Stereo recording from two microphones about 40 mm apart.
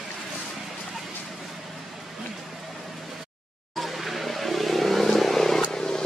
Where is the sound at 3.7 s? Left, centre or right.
Centre.